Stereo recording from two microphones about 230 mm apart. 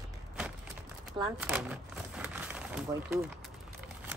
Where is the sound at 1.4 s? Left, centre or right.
Centre.